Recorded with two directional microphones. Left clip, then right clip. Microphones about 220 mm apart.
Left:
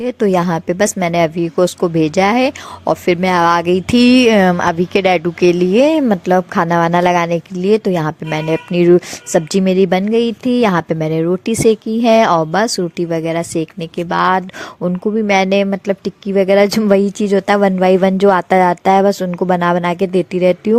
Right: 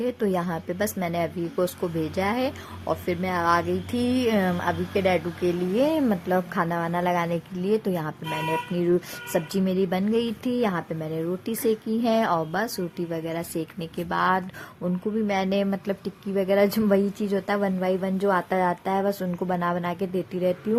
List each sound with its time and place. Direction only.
0.0 s a woman's voice: 35° left (ahead or behind)